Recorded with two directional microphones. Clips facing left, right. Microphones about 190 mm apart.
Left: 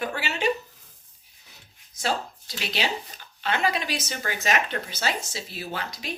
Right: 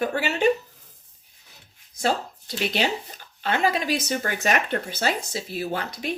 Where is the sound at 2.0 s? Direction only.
50° right (ahead or behind).